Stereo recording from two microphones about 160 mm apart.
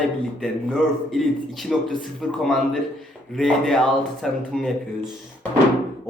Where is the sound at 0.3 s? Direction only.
5° left (ahead or behind).